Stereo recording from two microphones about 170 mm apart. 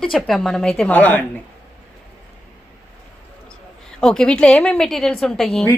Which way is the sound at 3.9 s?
5° left (ahead or behind).